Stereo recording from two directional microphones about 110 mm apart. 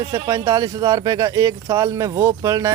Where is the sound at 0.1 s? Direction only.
30° right (ahead or behind).